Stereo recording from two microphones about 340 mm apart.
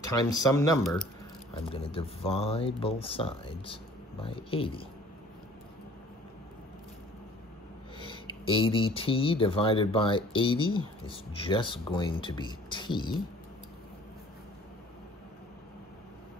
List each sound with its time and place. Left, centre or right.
0.1 s speech: centre
8.0 s speech: centre